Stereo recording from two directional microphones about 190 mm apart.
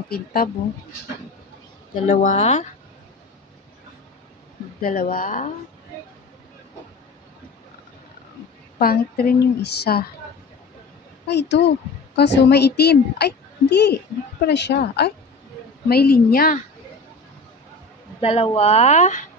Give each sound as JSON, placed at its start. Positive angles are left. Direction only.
{"t": 0.1, "sound": "a woman's voice", "side_deg": 50}
{"t": 2.0, "sound": "speech", "side_deg": 40}
{"t": 4.8, "sound": "a woman's voice", "side_deg": 50}
{"t": 8.7, "sound": "a woman's voice", "side_deg": 50}
{"t": 11.2, "sound": "a woman's voice", "side_deg": 65}
{"t": 18.2, "sound": "speech", "side_deg": 30}